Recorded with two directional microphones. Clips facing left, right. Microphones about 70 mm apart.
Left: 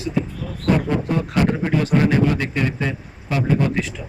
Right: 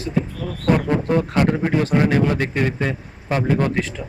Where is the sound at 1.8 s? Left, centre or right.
Right.